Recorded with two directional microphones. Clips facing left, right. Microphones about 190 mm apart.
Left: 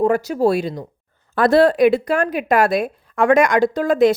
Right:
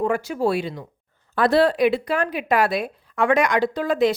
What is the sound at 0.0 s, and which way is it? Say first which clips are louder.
Speech: left 5 dB; 40° left (ahead or behind).